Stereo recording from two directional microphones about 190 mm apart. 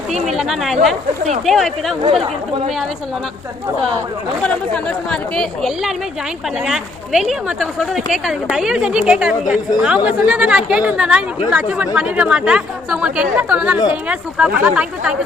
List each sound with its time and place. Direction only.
0.1 s speech: centre (ahead or behind)
2.0 s speech: 30° right (ahead or behind)
4.4 s speech: 5° left (ahead or behind)